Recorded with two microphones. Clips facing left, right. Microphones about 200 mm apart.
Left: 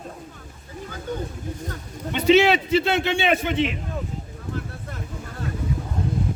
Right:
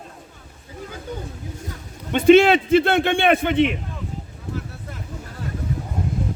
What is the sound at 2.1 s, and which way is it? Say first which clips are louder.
A man's voice: right 4 dB; 50° right (ahead or behind).